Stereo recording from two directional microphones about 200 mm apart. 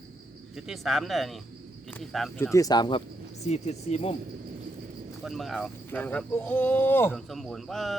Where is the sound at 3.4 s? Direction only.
35° left (ahead or behind).